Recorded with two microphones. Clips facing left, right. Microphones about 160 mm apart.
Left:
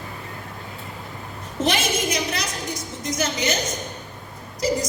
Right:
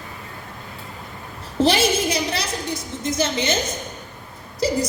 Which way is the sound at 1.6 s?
30° right (ahead or behind).